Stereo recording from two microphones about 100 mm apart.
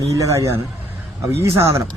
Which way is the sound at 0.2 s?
30° right (ahead or behind).